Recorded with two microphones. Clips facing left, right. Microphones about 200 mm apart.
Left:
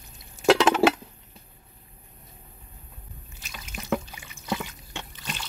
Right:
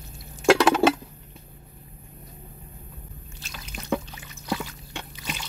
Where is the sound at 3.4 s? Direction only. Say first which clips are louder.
Right 1 dB; centre (ahead or behind).